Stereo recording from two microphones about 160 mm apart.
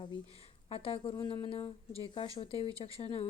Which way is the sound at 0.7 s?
35° left (ahead or behind).